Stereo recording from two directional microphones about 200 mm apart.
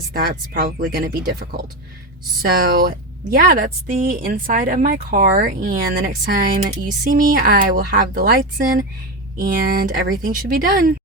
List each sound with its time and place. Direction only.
0.1 s speech: 50° right (ahead or behind)